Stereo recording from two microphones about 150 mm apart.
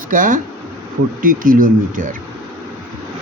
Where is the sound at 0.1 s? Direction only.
65° right (ahead or behind).